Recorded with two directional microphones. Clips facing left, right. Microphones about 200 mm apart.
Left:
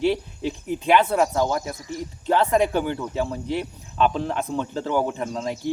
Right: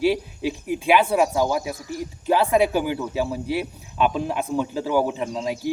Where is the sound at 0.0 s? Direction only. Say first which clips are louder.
Right 1 dB; 10° right (ahead or behind).